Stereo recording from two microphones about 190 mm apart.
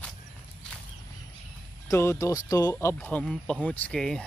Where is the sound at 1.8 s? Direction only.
15° left (ahead or behind).